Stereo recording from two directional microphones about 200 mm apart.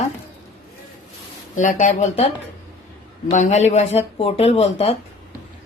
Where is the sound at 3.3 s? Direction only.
35° left (ahead or behind).